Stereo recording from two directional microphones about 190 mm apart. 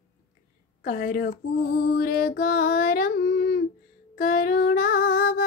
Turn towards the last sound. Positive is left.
turn(degrees=50)  # may be behind; listen again after turning